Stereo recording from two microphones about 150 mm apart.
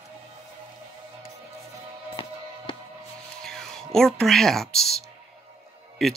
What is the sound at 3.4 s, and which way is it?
Speech, 5° left (ahead or behind).